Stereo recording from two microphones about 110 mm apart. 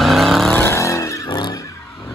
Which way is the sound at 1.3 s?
40° left (ahead or behind).